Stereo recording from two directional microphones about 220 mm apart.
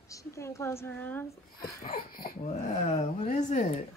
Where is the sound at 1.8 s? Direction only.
40° left (ahead or behind).